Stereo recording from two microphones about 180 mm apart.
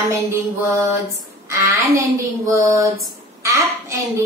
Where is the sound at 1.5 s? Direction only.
15° right (ahead or behind).